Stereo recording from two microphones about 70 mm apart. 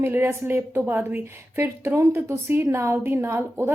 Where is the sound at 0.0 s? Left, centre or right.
Right.